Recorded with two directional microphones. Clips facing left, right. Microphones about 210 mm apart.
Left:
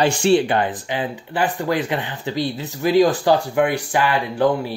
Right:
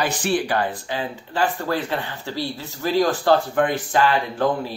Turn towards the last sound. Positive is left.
turn(degrees=15)  # may be behind; listen again after turning